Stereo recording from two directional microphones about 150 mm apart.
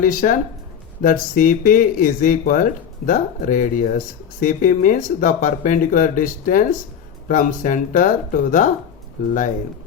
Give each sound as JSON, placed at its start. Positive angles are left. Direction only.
{"t": 0.0, "sound": "speech", "side_deg": 65}